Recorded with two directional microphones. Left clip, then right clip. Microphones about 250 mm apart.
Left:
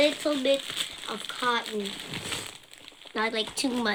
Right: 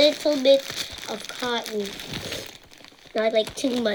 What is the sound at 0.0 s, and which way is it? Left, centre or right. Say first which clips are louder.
Speech: right 6 dB; right.